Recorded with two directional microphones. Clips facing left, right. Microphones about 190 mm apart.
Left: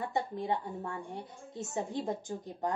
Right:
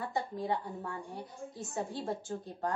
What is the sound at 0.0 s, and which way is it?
A woman's voice, 20° left (ahead or behind).